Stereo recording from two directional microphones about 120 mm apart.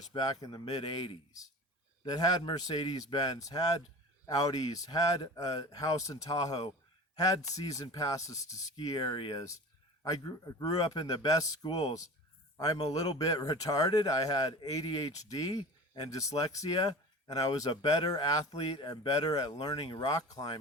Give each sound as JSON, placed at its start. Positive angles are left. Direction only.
{"t": 0.0, "sound": "a man's voice", "side_deg": 35}